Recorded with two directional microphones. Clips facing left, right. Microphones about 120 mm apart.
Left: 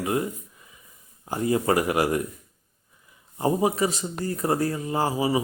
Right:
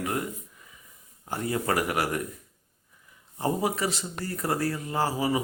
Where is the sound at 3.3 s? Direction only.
20° left (ahead or behind).